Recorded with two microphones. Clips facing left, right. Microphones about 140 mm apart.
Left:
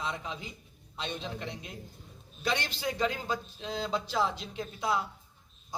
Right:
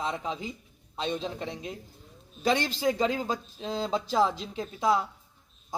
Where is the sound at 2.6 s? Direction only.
40° right (ahead or behind).